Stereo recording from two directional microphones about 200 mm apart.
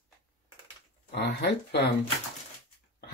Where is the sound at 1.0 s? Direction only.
55° left (ahead or behind).